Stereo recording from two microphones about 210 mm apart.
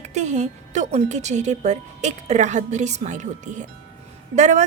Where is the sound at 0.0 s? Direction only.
35° right (ahead or behind).